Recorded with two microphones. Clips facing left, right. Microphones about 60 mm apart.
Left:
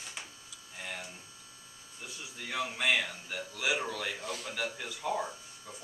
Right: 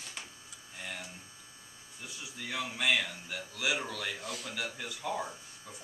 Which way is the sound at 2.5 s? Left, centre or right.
Centre.